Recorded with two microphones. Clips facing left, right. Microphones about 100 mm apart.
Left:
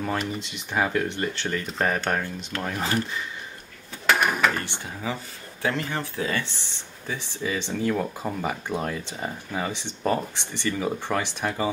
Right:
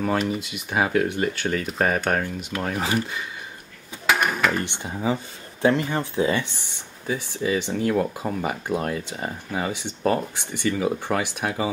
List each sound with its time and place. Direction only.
0.0 s speech: 5° right (ahead or behind)
4.1 s drawer open or close: centre (ahead or behind)
4.6 s speech: 20° right (ahead or behind)